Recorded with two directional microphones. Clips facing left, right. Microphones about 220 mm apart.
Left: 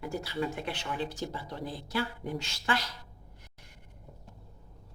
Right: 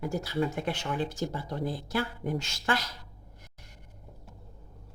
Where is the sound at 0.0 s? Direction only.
45° right (ahead or behind).